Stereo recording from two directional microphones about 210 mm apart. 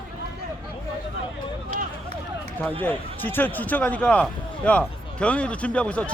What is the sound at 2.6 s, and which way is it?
A man's voice, 10° left (ahead or behind).